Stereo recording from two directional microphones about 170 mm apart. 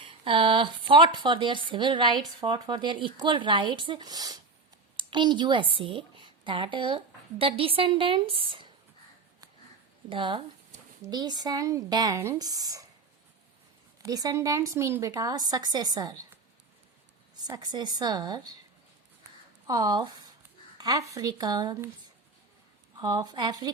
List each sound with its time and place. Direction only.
0.0 s a woman's voice: 30° right (ahead or behind)
10.1 s speech: 30° right (ahead or behind)
14.0 s speech: 20° right (ahead or behind)
17.3 s speech: 25° right (ahead or behind)
19.6 s speech: 20° right (ahead or behind)
23.0 s speech: 20° right (ahead or behind)